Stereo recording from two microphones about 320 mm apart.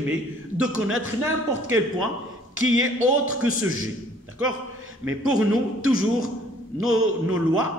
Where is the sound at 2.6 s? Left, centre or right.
Right.